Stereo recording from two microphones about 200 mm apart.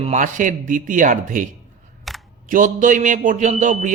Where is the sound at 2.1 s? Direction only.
Centre (ahead or behind).